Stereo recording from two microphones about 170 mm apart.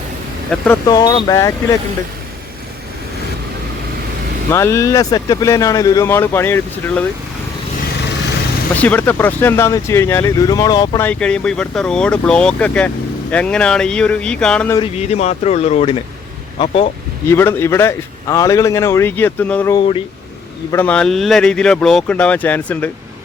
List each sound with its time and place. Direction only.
0.5 s speech: 5° left (ahead or behind)
0.9 s speech: 25° left (ahead or behind)
4.5 s a man's voice: 15° left (ahead or behind)
8.7 s a man's voice: 10° left (ahead or behind)
11.0 s speech: 5° left (ahead or behind)
14.8 s speech: 40° left (ahead or behind)
17.2 s a man's voice: 15° left (ahead or behind)
20.7 s a man's voice: 10° left (ahead or behind)